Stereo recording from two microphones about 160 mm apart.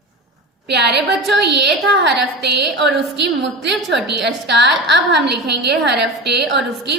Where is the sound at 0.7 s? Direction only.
90° right.